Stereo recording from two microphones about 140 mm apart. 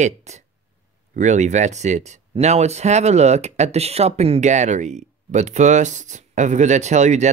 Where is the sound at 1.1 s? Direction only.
60° right (ahead or behind).